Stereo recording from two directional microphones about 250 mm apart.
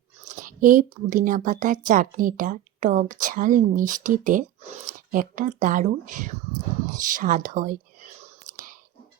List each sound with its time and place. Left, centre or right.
0.2 s speech: right
6.9 s whispering: right